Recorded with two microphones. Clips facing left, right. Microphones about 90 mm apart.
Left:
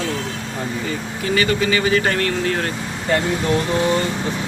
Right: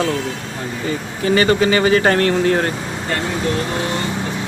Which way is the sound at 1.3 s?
35° right (ahead or behind).